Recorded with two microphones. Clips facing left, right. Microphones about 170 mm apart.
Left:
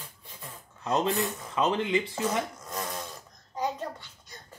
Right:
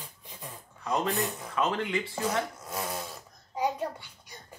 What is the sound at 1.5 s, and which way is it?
Speech, 20° left (ahead or behind).